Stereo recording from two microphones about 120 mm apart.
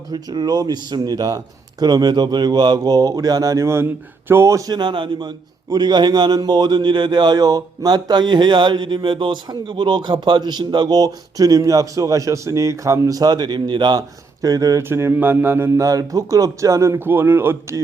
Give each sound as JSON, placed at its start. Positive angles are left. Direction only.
{"t": 0.1, "sound": "speech", "side_deg": -35}